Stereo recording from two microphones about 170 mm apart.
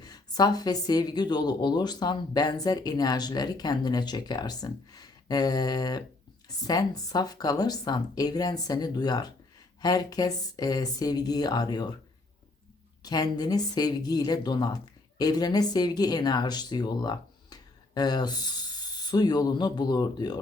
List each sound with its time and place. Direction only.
0.0 s speech: 25° left (ahead or behind)
13.0 s speech: 20° left (ahead or behind)